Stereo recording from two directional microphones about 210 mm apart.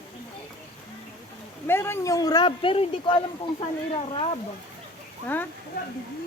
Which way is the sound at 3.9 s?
25° left (ahead or behind).